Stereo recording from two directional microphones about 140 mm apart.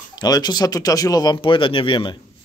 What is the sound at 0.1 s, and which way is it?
Speech, 30° left (ahead or behind).